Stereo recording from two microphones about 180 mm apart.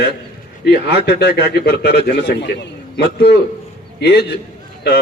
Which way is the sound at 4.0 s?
65° left (ahead or behind).